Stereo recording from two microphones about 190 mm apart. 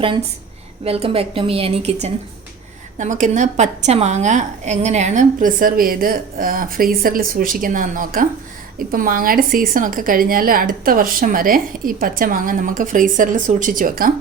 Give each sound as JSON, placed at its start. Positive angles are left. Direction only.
{"t": 0.9, "sound": "a woman's voice", "side_deg": -30}
{"t": 3.0, "sound": "a woman's voice", "side_deg": -40}